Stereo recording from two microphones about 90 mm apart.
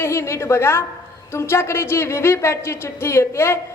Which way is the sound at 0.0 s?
30° left (ahead or behind).